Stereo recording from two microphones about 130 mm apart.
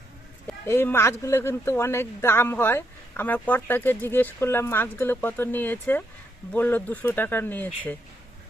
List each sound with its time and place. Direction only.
0.4 s speech: 15° left (ahead or behind)